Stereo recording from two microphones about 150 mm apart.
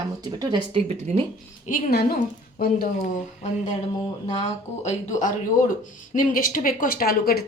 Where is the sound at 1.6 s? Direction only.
60° left (ahead or behind); by 2.2 s 90° left.